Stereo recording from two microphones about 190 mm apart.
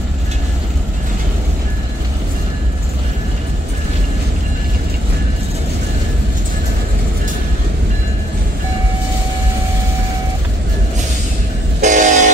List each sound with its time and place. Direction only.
11.8 s vehicle: 40° right (ahead or behind)